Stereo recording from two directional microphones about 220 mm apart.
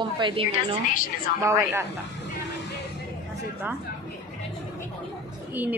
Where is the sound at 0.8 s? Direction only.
40° left (ahead or behind).